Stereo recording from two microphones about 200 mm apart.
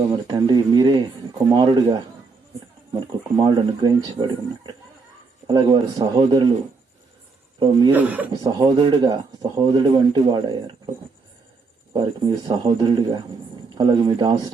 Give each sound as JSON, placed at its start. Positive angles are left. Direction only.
{"t": 0.3, "sound": "a sound", "side_deg": -20}
{"t": 2.9, "sound": "speech", "side_deg": -20}
{"t": 7.6, "sound": "speech", "side_deg": -25}
{"t": 7.9, "sound": "speech", "side_deg": -5}
{"t": 8.3, "sound": "speech", "side_deg": -20}
{"t": 11.9, "sound": "speech", "side_deg": -20}